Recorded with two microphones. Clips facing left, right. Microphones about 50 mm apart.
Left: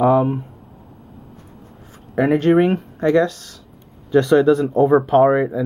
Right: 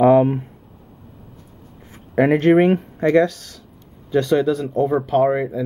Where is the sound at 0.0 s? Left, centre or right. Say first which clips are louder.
Right 2 dB; centre.